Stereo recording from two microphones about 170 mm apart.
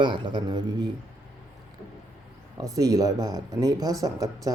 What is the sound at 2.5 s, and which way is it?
Speech, 20° right (ahead or behind).